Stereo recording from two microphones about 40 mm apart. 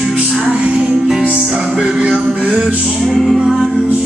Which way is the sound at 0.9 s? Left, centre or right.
Centre.